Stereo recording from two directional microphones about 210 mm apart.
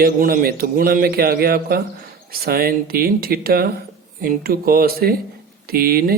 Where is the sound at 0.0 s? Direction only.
45° right (ahead or behind).